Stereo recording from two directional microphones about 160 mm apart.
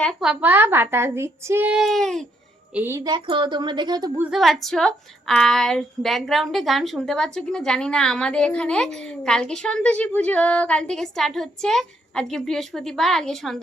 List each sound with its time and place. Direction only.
0.0 s speech: centre (ahead or behind)
2.7 s speech: 15° right (ahead or behind)
3.0 s a woman's voice: 30° right (ahead or behind)
4.2 s a woman's voice: centre (ahead or behind)